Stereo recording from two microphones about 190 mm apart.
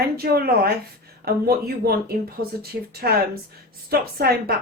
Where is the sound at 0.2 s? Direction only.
55° right (ahead or behind).